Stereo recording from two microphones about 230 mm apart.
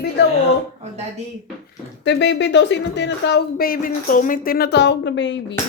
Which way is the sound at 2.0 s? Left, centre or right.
Left.